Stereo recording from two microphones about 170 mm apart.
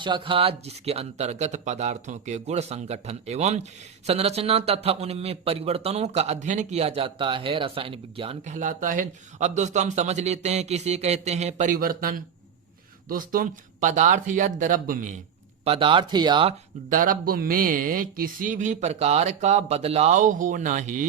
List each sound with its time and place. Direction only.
0.0 s speech: 30° right (ahead or behind)
8.4 s speech: 50° right (ahead or behind)
15.6 s speech: 35° right (ahead or behind)
16.9 s speech: 55° right (ahead or behind)